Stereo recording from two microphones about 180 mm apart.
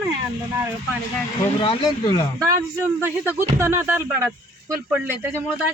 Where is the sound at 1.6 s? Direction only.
30° left (ahead or behind).